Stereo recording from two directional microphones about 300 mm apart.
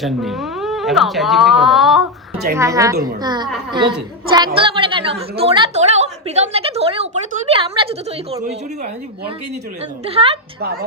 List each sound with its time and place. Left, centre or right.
0.0 s a woman's voice: centre
10.1 s a woman's voice: centre